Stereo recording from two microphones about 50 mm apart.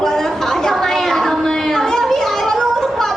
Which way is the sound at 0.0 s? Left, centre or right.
Centre.